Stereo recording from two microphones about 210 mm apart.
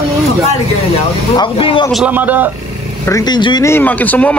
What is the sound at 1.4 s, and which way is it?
Speech, 25° left (ahead or behind).